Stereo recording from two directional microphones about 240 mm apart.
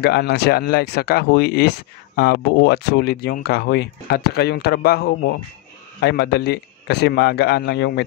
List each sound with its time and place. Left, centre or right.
0.0 s a man's voice: left